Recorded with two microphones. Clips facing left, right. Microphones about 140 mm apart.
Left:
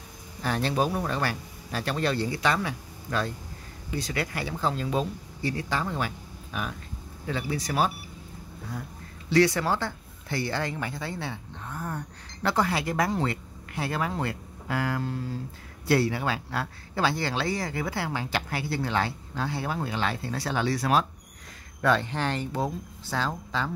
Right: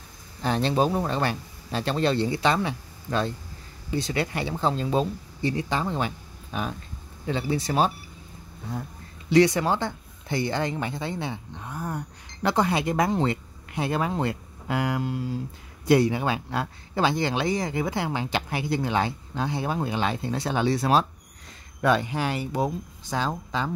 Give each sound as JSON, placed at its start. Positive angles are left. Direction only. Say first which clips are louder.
{"t": 0.4, "sound": "speech", "louder": "right 3 dB", "side_deg": -25}
{"t": 9.3, "sound": "speech", "louder": "right 3 dB", "side_deg": -20}
{"t": 21.8, "sound": "speech", "louder": "right 2 dB", "side_deg": -15}